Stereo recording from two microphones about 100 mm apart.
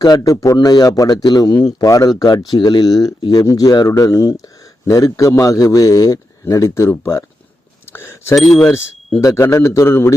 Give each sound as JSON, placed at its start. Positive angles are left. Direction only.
{"t": 0.0, "sound": "a man's voice", "side_deg": 40}
{"t": 7.9, "sound": "a sound", "side_deg": 25}
{"t": 8.5, "sound": "a man's voice", "side_deg": 25}